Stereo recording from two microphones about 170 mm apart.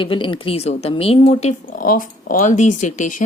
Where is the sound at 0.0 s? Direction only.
30° left (ahead or behind).